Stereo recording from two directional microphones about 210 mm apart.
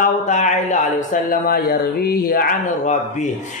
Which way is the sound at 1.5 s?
45° left (ahead or behind).